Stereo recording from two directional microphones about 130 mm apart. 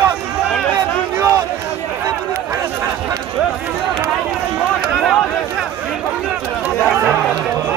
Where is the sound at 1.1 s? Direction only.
15° right (ahead or behind).